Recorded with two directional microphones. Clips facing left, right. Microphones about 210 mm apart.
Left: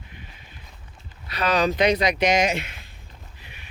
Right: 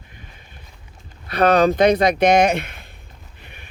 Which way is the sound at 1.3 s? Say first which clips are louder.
Right 7 dB; 55° right (ahead or behind).